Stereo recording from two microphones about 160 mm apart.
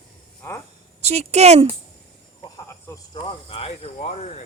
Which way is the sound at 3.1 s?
30° left (ahead or behind).